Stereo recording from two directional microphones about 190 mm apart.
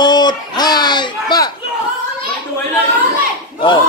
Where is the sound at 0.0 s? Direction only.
20° left (ahead or behind).